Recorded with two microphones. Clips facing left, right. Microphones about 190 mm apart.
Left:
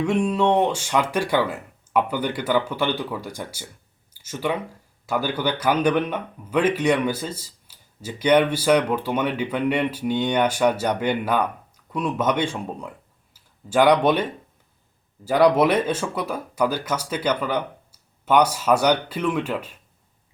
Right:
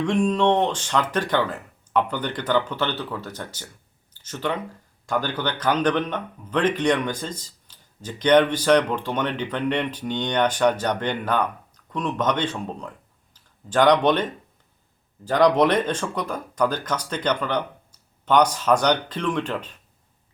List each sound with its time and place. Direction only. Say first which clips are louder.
0.0 s speech: even; 10° left (ahead or behind)